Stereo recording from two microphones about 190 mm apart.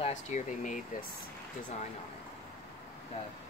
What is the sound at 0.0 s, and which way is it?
Speech, 40° left (ahead or behind).